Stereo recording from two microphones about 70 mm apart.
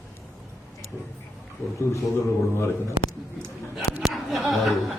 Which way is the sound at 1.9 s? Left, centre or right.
Left.